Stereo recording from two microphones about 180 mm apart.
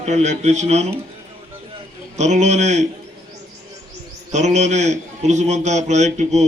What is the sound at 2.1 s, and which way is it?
Speech, 40° right (ahead or behind).